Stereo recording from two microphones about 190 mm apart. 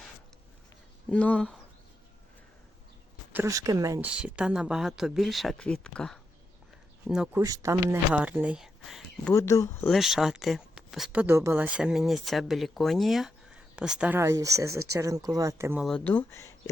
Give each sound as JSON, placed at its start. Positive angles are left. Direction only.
{"t": 1.1, "sound": "speech", "side_deg": 5}
{"t": 3.3, "sound": "speech", "side_deg": -15}
{"t": 4.1, "sound": "speech", "side_deg": -5}
{"t": 7.3, "sound": "speech", "side_deg": -15}
{"t": 9.3, "sound": "speech", "side_deg": 15}
{"t": 9.9, "sound": "speech", "side_deg": 0}
{"t": 15.8, "sound": "speech", "side_deg": 5}